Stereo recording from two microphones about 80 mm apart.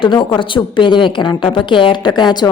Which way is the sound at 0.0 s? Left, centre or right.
Left.